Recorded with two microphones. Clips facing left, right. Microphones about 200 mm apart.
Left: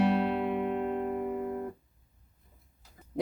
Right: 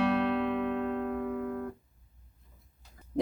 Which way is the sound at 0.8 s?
20° left (ahead or behind).